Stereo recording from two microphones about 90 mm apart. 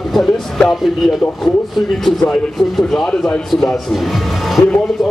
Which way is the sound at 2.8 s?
5° left (ahead or behind).